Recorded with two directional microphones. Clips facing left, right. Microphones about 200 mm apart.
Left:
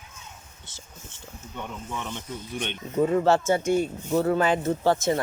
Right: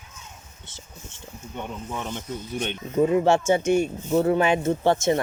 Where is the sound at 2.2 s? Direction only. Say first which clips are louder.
Right 3 dB; 45° right (ahead or behind).